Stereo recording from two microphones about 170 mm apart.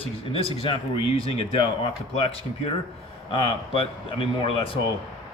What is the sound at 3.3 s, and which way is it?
Speech, 30° left (ahead or behind).